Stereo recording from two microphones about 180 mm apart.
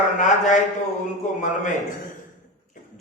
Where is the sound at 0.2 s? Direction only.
40° left (ahead or behind).